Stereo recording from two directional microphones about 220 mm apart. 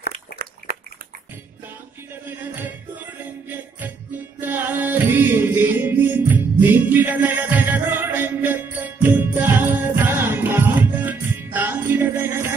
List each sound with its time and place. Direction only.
2.2 s music: 10° right (ahead or behind)